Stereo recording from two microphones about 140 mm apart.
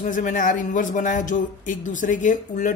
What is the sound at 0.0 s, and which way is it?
Speech, 65° left (ahead or behind).